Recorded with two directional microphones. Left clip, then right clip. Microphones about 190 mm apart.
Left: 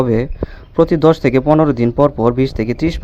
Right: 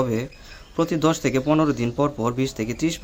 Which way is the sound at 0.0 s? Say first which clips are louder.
Left 9 dB; 30° left (ahead or behind).